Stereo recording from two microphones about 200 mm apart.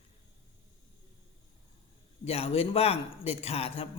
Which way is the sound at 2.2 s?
30° left (ahead or behind).